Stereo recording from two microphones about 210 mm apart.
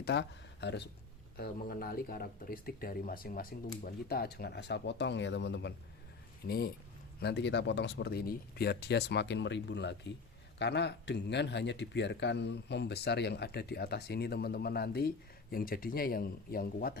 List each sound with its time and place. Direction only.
0.0 s speech: 55° left (ahead or behind)